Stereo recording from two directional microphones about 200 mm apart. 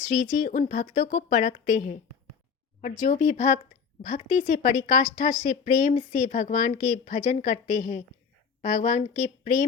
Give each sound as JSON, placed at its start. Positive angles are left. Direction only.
{"t": 0.1, "sound": "a woman's voice", "side_deg": 40}
{"t": 3.0, "sound": "a woman's voice", "side_deg": 40}